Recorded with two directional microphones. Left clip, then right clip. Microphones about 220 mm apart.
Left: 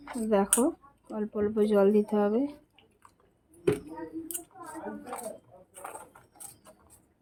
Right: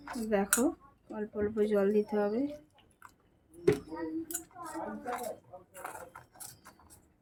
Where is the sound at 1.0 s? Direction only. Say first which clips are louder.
Left 4 dB; 30° left (ahead or behind).